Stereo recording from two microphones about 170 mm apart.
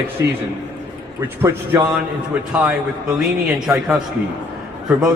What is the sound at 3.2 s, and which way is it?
A man's voice, centre (ahead or behind).